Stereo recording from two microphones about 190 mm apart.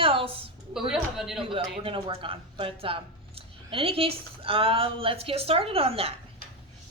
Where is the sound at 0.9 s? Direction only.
5° right (ahead or behind).